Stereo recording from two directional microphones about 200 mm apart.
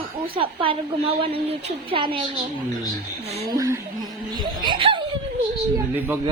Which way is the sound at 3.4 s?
15° right (ahead or behind).